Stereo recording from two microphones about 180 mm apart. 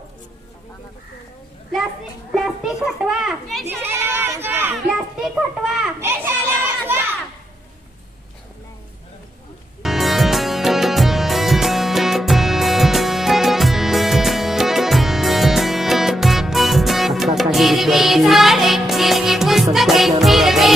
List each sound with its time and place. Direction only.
2.3 s a child's voice: centre (ahead or behind)
5.2 s a sound: centre (ahead or behind)
6.0 s children playing: 15° right (ahead or behind)
9.8 s music: centre (ahead or behind)